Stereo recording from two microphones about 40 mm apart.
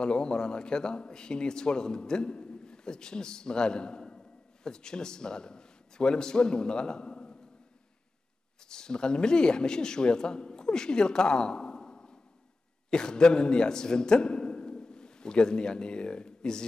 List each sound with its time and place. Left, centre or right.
0.0 s a man's voice: left
8.6 s a man's voice: centre